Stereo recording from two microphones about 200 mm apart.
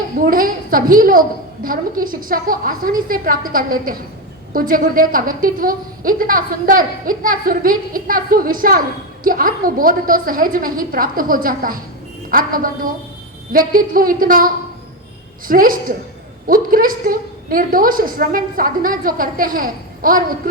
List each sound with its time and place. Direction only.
0.2 s a woman's voice: 45° right (ahead or behind)